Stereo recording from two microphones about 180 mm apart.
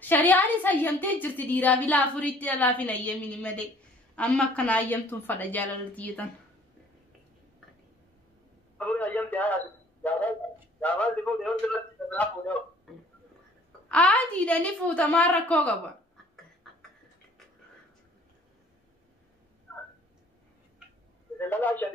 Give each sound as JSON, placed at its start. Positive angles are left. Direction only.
{"t": 0.0, "sound": "a woman's voice", "side_deg": 10}
{"t": 8.7, "sound": "speech", "side_deg": 10}
{"t": 10.8, "sound": "a woman's voice", "side_deg": 5}
{"t": 13.8, "sound": "a woman's voice", "side_deg": 5}
{"t": 19.7, "sound": "a sound", "side_deg": 10}
{"t": 21.4, "sound": "a woman's voice", "side_deg": 10}